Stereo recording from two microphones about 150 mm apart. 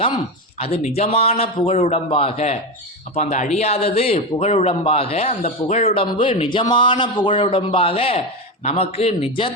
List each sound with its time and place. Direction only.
0.6 s speech: 45° left (ahead or behind)